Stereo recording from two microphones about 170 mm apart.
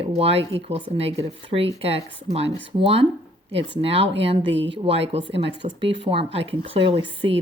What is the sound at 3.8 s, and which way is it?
Speech, 35° right (ahead or behind).